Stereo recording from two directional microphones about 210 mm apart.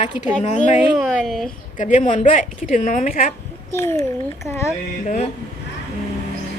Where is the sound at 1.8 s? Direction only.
35° left (ahead or behind).